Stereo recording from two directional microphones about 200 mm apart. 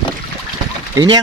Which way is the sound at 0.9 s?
20° right (ahead or behind).